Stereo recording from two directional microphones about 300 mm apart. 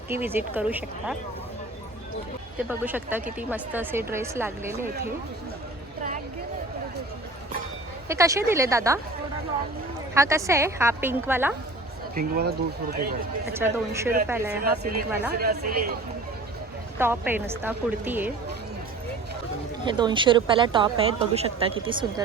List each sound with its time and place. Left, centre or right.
0.1 s speech: centre
2.6 s speech: centre
8.0 s speech: centre
10.2 s speech: centre
12.1 s speech: right
13.5 s speech: centre
14.6 s speech: right
17.0 s speech: centre
19.8 s speech: centre